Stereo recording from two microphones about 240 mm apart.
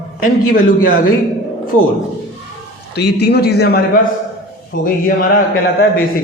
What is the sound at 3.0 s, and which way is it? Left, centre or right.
A man's voice, left.